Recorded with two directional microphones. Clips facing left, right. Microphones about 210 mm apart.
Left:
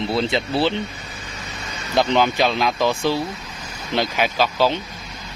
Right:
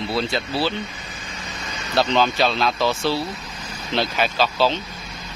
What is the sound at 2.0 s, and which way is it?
Speech, 15° left (ahead or behind).